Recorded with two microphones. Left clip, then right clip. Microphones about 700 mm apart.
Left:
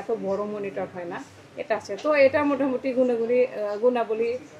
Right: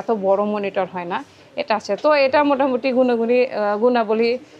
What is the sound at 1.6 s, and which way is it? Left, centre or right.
A woman's voice, right.